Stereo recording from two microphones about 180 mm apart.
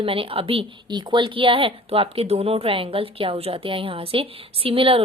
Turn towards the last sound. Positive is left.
turn(degrees=-30)  # may be behind; listen again after turning